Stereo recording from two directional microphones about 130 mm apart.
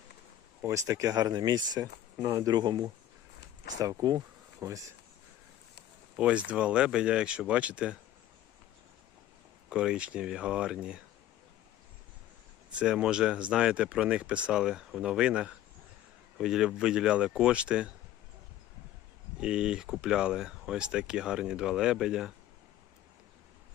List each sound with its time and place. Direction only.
0.6 s speech: 25° right (ahead or behind)
1.8 s speech: 20° right (ahead or behind)
6.1 s speech: 10° right (ahead or behind)
9.6 s speech: 5° right (ahead or behind)
12.7 s speech: 5° right (ahead or behind)
19.4 s speech: 5° right (ahead or behind)